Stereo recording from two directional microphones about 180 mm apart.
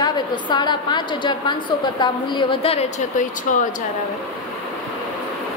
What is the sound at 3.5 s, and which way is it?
Speech, 45° left (ahead or behind).